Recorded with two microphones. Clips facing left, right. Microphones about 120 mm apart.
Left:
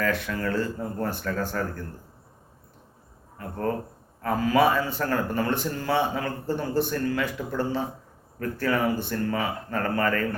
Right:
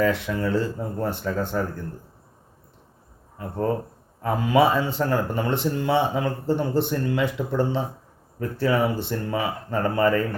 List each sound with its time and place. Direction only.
0.0 s speech: 20° right (ahead or behind)
4.2 s speech: 20° right (ahead or behind)